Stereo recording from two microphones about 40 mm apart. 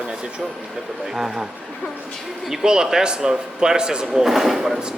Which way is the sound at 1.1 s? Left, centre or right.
Centre.